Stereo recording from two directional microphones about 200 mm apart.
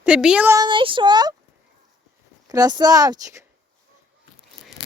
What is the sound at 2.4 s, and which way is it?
Speech, 20° right (ahead or behind).